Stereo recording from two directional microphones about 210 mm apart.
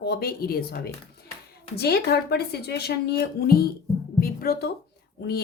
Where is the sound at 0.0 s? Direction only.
50° left (ahead or behind).